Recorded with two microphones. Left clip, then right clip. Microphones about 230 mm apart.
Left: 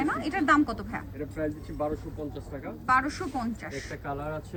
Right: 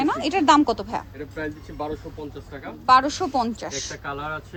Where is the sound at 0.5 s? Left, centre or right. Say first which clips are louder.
Right 7 dB; centre.